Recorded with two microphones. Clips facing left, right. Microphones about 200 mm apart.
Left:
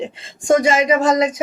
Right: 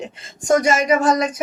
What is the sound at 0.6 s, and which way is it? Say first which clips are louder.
Speech: left 1 dB; 90° left.